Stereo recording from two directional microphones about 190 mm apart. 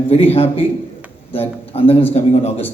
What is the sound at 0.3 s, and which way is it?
A man's voice, 30° left (ahead or behind).